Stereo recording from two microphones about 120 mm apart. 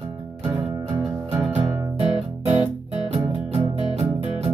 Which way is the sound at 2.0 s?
55° right (ahead or behind).